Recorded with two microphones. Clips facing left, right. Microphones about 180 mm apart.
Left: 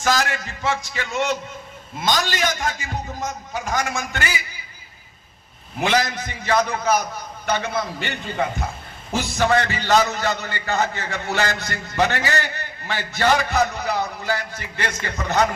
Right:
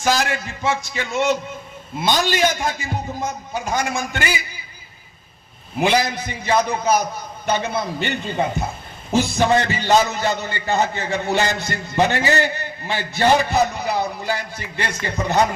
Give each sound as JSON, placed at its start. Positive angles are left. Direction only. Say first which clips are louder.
{"t": 0.0, "sound": "a man's voice", "louder": "right 1 dB", "side_deg": -15}
{"t": 5.8, "sound": "a man's voice", "louder": "right 2 dB", "side_deg": -15}